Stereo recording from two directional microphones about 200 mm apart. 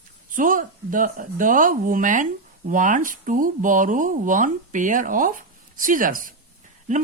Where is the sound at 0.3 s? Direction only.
40° right (ahead or behind).